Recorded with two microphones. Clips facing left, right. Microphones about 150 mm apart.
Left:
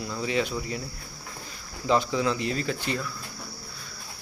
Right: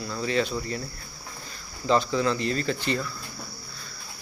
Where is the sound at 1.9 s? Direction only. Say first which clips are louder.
Right 1 dB; 10° left (ahead or behind).